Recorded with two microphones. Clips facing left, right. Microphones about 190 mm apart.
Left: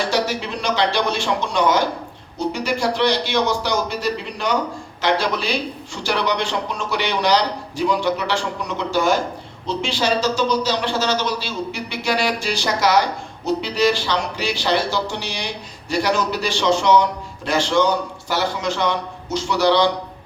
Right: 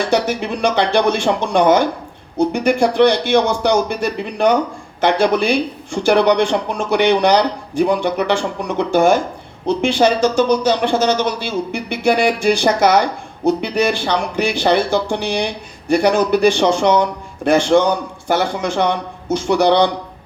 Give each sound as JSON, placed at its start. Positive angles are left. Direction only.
{"t": 0.1, "sound": "speech", "side_deg": -55}